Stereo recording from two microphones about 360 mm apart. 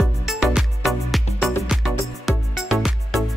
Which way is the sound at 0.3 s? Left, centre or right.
Centre.